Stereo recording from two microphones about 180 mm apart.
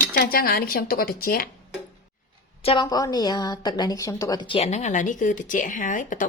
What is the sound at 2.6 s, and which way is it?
A woman's voice, 25° left (ahead or behind).